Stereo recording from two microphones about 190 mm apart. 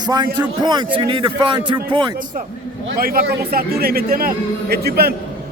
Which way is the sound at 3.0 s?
50° right (ahead or behind).